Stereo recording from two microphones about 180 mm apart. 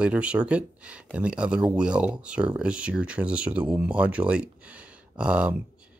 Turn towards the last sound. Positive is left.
turn(degrees=-5)  # may be behind; listen again after turning